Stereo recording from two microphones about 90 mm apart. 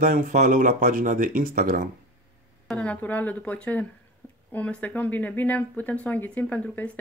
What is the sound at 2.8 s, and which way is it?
Speech, 15° left (ahead or behind).